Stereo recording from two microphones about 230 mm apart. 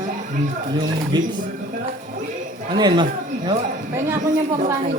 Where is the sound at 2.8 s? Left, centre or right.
Centre.